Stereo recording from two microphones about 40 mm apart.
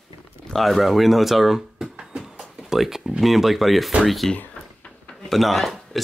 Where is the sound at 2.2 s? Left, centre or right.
Centre.